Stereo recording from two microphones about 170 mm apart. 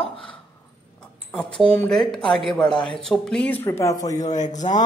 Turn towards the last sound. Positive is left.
turn(degrees=45)  # may be behind; listen again after turning